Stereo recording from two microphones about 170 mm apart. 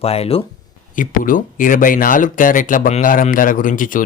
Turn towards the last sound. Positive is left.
turn(degrees=50)  # may be behind; listen again after turning